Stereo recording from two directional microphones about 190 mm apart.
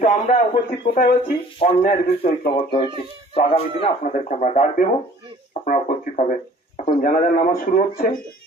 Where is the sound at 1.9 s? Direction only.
35° left (ahead or behind).